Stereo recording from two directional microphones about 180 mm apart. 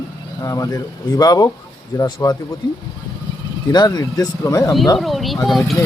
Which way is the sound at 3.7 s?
20° left (ahead or behind).